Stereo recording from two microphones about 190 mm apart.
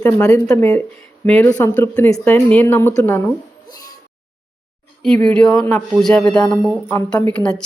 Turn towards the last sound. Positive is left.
turn(degrees=5)  # may be behind; listen again after turning